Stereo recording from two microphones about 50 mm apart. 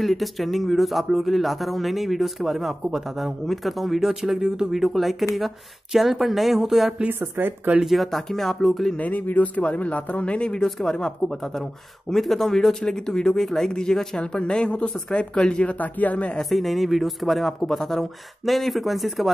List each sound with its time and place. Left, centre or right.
0.0 s speech: centre
4.8 s speech: centre
7.1 s speech: right
7.8 s speech: centre
8.9 s speech: left
16.3 s speech: centre